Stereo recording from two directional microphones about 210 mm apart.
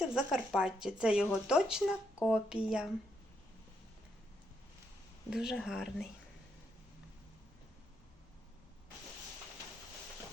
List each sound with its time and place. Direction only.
0.2 s speech: 5° right (ahead or behind)
5.3 s speech: centre (ahead or behind)